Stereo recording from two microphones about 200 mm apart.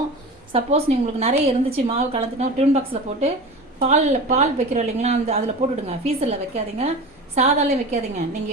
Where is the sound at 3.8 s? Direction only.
35° right (ahead or behind).